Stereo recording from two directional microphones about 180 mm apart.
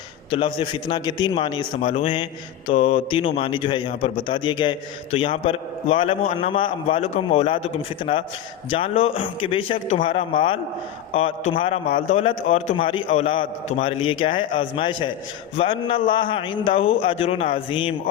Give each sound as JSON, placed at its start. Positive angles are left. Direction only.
{"t": 0.3, "sound": "a man's voice", "side_deg": 30}